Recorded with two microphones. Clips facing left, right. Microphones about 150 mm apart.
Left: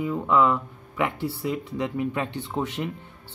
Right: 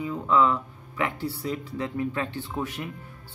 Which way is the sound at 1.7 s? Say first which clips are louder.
Left 2 dB; 20° left (ahead or behind).